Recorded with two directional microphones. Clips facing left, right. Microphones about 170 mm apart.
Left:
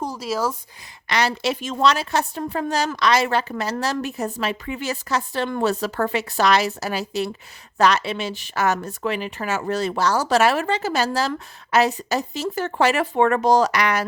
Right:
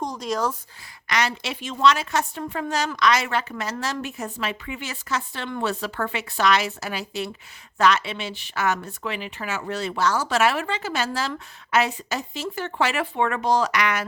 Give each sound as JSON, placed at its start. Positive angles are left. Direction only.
{"t": 0.0, "sound": "speech", "side_deg": 5}
{"t": 1.0, "sound": "a woman's voice", "side_deg": 30}